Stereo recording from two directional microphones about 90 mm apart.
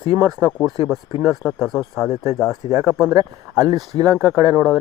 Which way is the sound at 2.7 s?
30° right (ahead or behind).